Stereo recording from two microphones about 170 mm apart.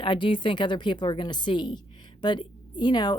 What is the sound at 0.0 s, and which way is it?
Speech, 30° left (ahead or behind).